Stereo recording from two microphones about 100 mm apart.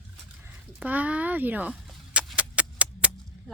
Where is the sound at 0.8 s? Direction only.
15° right (ahead or behind).